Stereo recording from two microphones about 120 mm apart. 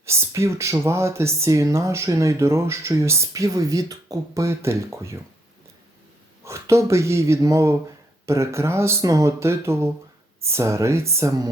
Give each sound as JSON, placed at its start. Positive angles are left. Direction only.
{"t": 0.0, "sound": "speech", "side_deg": -20}
{"t": 6.4, "sound": "speech", "side_deg": -25}